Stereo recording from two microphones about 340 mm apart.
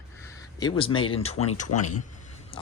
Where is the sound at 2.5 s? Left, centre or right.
Centre.